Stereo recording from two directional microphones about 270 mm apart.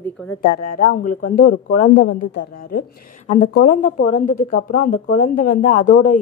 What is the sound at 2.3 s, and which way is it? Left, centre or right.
Speech, left.